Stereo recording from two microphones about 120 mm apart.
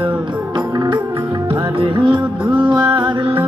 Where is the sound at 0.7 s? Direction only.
40° right (ahead or behind).